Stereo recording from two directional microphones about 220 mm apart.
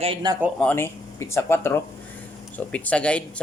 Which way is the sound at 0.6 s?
10° left (ahead or behind).